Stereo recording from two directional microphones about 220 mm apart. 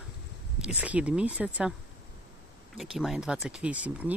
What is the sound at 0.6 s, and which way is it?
Speech, 5° right (ahead or behind).